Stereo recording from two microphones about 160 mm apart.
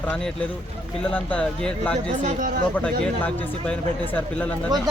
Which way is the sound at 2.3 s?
55° right (ahead or behind).